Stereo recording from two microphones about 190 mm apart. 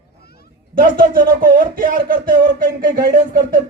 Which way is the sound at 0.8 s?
50° right (ahead or behind).